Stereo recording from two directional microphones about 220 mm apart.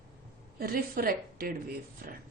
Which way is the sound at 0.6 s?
40° right (ahead or behind).